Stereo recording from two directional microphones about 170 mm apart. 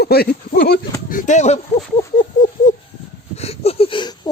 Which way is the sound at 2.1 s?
45° left (ahead or behind).